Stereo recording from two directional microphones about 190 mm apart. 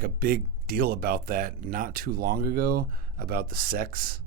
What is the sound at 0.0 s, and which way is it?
Speech, 50° right (ahead or behind).